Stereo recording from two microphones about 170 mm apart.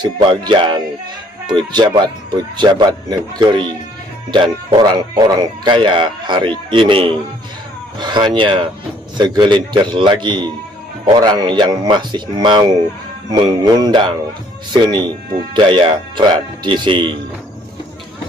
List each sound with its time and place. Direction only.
0.0 s speech: 25° right (ahead or behind)